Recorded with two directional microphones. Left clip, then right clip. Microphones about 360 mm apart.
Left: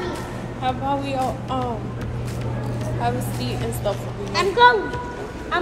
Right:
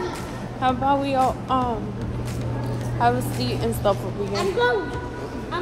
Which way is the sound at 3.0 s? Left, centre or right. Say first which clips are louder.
Right 5 dB; centre.